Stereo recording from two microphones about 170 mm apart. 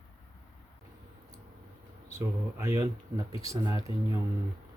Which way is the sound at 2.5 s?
15° right (ahead or behind).